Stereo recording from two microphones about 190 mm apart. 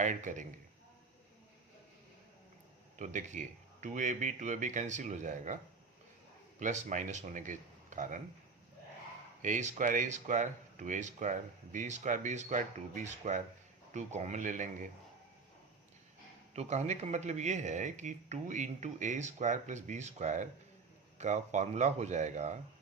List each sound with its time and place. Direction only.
0.0 s speech: 40° right (ahead or behind)
3.0 s speech: 40° right (ahead or behind)
6.6 s speech: 40° right (ahead or behind)
9.4 s speech: 40° right (ahead or behind)
16.6 s speech: 35° right (ahead or behind)